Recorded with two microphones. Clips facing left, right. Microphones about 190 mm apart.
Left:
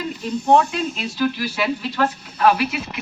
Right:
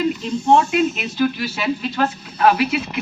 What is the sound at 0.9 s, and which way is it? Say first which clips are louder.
Speech: right 2 dB; 25° right (ahead or behind).